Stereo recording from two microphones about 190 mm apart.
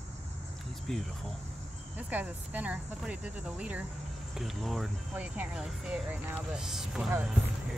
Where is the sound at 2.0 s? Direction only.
10° right (ahead or behind).